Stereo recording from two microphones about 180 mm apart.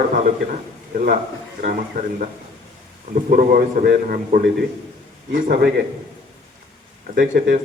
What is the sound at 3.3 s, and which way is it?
Speech, 50° right (ahead or behind).